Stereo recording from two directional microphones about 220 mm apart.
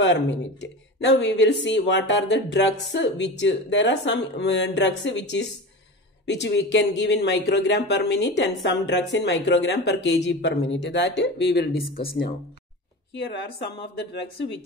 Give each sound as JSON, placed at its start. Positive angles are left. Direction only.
{"t": 0.0, "sound": "speech", "side_deg": 55}